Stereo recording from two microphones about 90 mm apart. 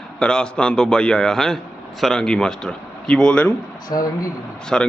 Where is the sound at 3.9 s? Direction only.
50° left (ahead or behind).